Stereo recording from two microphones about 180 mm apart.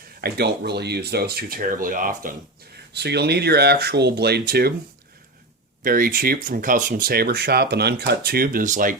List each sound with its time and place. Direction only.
0.2 s speech: 65° right (ahead or behind)
2.9 s speech: 65° right (ahead or behind)
5.8 s speech: 50° right (ahead or behind)